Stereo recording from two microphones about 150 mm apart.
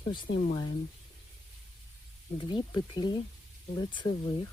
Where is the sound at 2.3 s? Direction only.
30° left (ahead or behind).